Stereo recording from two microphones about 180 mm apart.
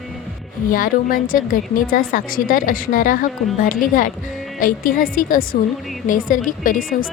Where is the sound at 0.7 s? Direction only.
50° left (ahead or behind).